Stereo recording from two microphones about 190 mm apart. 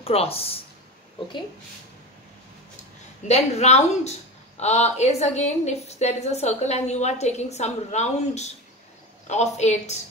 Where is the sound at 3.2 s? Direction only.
35° left (ahead or behind).